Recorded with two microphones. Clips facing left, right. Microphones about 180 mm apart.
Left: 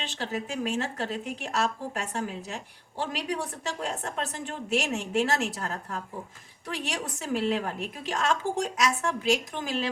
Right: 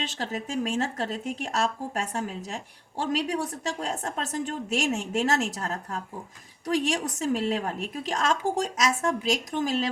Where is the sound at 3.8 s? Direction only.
40° right (ahead or behind).